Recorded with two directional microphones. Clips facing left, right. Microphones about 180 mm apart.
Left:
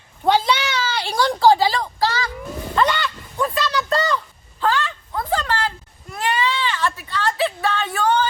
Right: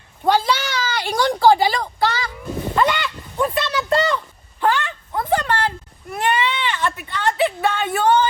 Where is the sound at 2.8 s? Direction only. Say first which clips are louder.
Even; 15° right (ahead or behind).